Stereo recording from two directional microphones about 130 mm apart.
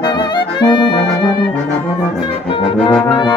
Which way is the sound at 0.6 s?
35° left (ahead or behind).